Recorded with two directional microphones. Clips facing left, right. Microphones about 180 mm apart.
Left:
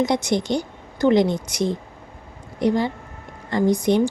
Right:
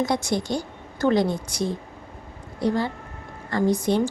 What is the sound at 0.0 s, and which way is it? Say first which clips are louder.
A woman's voice: left 3 dB; 20° left (ahead or behind).